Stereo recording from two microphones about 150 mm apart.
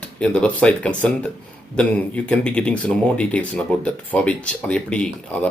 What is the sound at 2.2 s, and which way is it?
A man's voice, 5° left (ahead or behind).